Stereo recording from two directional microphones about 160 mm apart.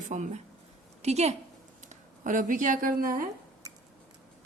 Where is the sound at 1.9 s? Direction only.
55° right (ahead or behind).